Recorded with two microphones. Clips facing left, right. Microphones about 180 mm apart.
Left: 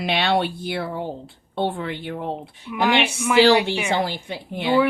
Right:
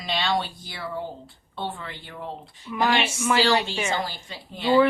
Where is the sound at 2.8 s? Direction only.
15° left (ahead or behind).